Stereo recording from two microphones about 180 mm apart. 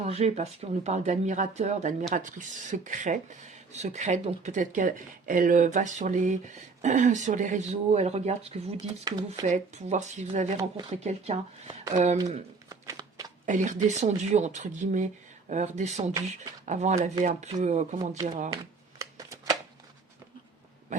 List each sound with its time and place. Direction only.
0.0 s speech: 35° right (ahead or behind)
9.1 s speech: 20° right (ahead or behind)
9.4 s speech: 40° right (ahead or behind)
12.6 s a sound: 20° right (ahead or behind)
13.4 s speech: 45° right (ahead or behind)
18.5 s shuffling cards: 20° right (ahead or behind)